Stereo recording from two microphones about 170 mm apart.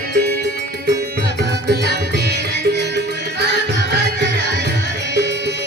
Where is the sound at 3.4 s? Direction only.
80° right.